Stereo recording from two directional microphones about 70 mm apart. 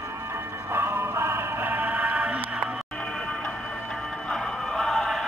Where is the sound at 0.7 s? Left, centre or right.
Right.